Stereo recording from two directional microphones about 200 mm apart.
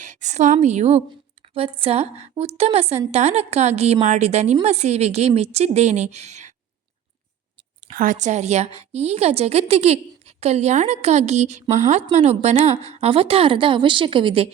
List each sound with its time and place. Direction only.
0.0 s a woman's voice: 40° right (ahead or behind)
7.9 s a woman's voice: 40° right (ahead or behind)